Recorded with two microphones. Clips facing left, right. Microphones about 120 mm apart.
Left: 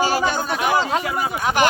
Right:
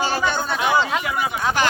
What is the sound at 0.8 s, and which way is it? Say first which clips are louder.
Speech: left 1 dB; 35° left (ahead or behind).